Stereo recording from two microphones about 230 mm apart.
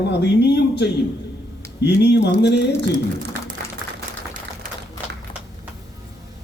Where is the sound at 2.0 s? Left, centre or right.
Left.